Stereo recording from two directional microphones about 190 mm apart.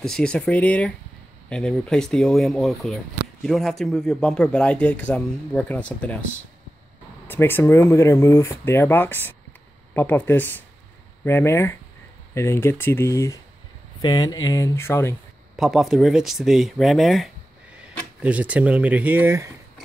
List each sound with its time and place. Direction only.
0.0 s a man's voice: 5° left (ahead or behind)
7.2 s speech: 10° left (ahead or behind)
15.5 s a man's voice: centre (ahead or behind)